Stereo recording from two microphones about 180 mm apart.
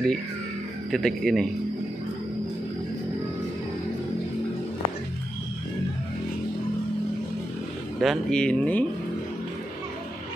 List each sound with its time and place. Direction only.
0.9 s speech: centre (ahead or behind)
8.0 s speech: centre (ahead or behind)